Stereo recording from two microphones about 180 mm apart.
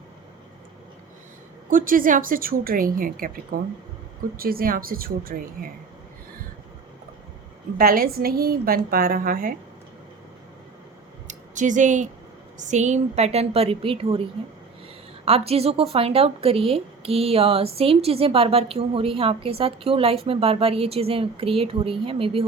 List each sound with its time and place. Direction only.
1.7 s a woman's voice: 50° right (ahead or behind)
7.8 s a woman's voice: 55° right (ahead or behind)
11.3 s a sound: 45° right (ahead or behind)
12.5 s speech: 40° right (ahead or behind)
15.2 s speech: 35° right (ahead or behind)